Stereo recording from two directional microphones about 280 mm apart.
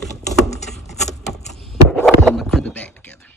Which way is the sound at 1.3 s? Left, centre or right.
Centre.